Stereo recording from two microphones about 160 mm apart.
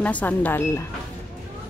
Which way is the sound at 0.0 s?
10° left (ahead or behind).